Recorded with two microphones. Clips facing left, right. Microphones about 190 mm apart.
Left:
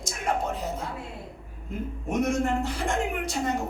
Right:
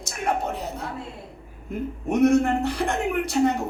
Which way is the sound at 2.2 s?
65° right (ahead or behind).